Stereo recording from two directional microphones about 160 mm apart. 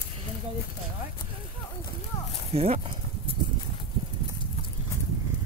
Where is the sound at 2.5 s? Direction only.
40° right (ahead or behind).